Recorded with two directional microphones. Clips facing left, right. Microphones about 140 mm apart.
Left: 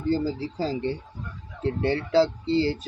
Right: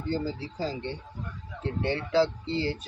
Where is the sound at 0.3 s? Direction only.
35° left (ahead or behind).